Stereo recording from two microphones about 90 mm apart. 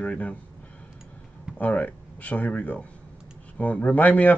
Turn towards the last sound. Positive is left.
turn(degrees=15)  # may be behind; listen again after turning